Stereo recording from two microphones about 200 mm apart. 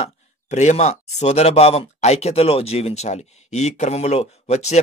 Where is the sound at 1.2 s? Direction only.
30° left (ahead or behind).